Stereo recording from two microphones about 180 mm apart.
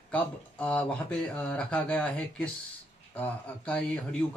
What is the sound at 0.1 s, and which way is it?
A man's voice, 5° left (ahead or behind).